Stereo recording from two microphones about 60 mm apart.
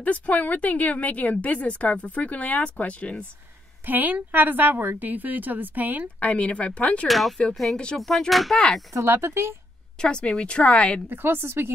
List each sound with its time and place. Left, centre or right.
0.0 s a woman's voice: left
3.8 s a woman's voice: right
6.1 s a woman's voice: left
7.1 s speech: centre
7.7 s speech: centre
8.1 s speech: centre
8.9 s speech: right
9.9 s speech: centre
11.1 s a woman's voice: right